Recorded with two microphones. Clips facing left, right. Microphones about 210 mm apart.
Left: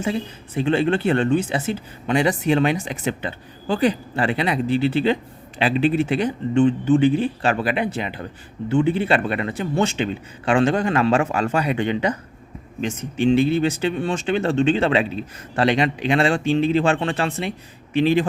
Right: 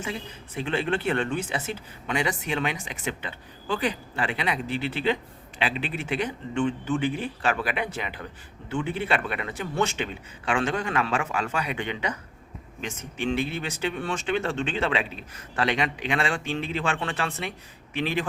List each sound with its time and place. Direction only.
0.0 s speech: 35° left (ahead or behind)